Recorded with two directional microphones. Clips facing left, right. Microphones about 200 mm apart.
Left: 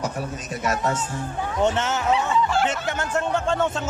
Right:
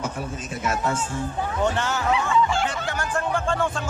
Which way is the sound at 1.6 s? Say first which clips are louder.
Left 3 dB; 20° left (ahead or behind).